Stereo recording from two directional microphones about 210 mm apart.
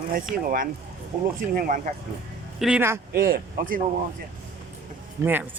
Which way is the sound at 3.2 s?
45° right (ahead or behind).